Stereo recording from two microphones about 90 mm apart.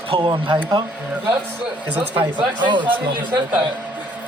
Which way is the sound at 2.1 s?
20° right (ahead or behind).